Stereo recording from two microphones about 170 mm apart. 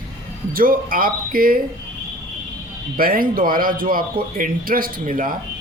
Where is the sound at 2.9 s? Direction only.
60° right (ahead or behind).